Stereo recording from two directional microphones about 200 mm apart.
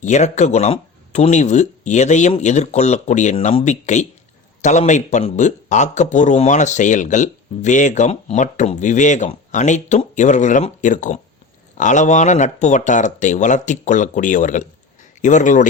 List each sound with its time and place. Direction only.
0.0 s speech: 35° left (ahead or behind)